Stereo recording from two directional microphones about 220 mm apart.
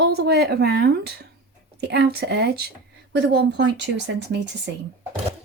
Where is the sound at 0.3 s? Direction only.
50° right (ahead or behind).